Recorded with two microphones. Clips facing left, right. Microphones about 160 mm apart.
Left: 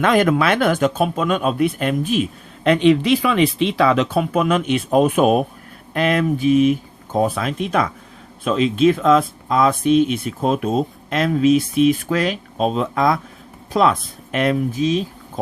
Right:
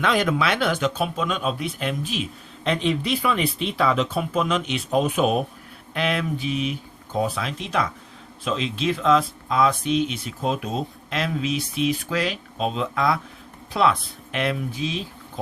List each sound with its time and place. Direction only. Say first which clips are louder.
0.0 s speech: left 6 dB; 50° left (ahead or behind)
2.6 s speech: left 9 dB; 75° left (ahead or behind); by 15.0 s 45° left (ahead or behind)